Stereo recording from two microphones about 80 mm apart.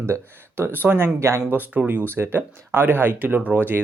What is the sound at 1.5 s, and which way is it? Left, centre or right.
Speech, right.